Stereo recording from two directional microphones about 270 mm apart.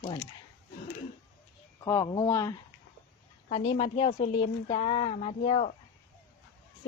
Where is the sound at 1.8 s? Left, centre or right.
Centre.